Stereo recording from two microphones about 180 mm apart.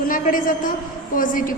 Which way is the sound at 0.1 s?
50° left (ahead or behind).